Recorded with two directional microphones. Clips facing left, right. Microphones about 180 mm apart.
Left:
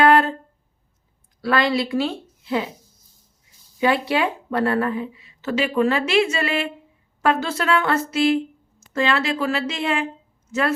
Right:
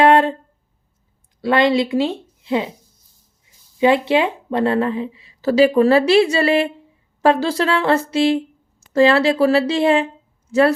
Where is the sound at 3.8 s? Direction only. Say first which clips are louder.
Right 5 dB; 25° right (ahead or behind).